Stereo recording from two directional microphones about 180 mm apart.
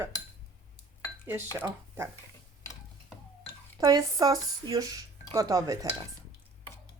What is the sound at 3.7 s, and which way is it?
Speech, 20° right (ahead or behind).